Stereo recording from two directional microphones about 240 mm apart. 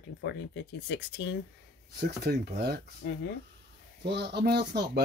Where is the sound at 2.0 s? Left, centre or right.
Right.